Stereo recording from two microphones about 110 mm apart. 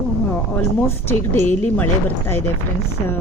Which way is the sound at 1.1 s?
20° left (ahead or behind).